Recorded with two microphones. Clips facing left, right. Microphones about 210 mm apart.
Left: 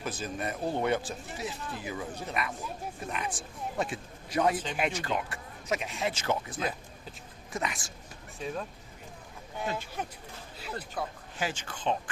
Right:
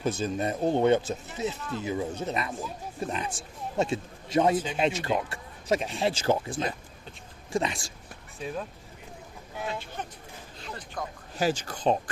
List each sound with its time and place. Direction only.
0.0 s speech: 25° right (ahead or behind)
8.4 s speech: centre (ahead or behind)
11.3 s speech: 40° right (ahead or behind)